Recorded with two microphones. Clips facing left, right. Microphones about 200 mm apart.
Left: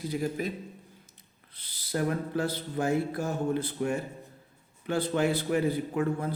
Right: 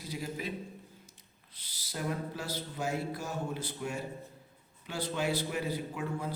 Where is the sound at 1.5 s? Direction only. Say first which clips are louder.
Left 10 dB; 55° left (ahead or behind).